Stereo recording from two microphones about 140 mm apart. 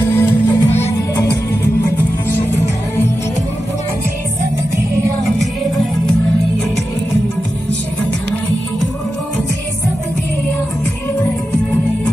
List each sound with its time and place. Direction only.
0.1 s music: 15° left (ahead or behind)